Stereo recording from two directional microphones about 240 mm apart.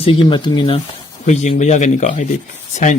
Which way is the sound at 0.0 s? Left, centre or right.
Left.